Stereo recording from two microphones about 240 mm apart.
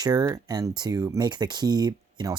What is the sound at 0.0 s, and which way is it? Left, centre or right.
Speech, centre.